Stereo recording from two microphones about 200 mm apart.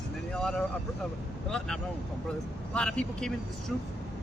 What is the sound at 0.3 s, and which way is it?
Speech, 5° left (ahead or behind).